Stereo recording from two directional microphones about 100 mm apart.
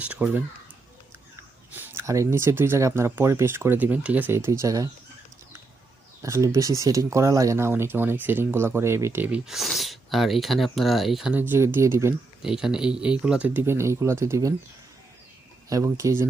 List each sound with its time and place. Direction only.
0.0 s speech: 15° right (ahead or behind)
1.7 s a sound: 20° right (ahead or behind)
2.0 s speech: 30° right (ahead or behind)
6.2 s speech: 30° right (ahead or behind)
9.2 s speech: 10° right (ahead or behind)
11.3 s speech: 20° right (ahead or behind)
12.4 s speech: 5° right (ahead or behind); by 14.5 s 30° right (ahead or behind)
15.7 s speech: 30° right (ahead or behind)